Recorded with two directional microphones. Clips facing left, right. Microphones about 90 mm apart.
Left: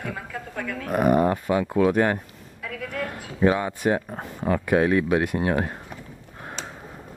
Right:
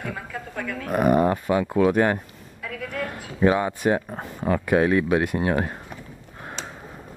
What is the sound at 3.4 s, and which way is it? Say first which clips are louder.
Speech: right 1 dB; 20° right (ahead or behind).